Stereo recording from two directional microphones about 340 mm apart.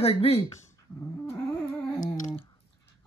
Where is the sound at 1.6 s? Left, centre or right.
Centre.